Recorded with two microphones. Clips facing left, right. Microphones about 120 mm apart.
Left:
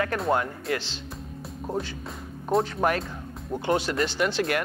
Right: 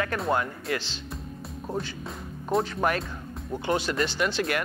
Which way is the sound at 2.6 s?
30° left (ahead or behind).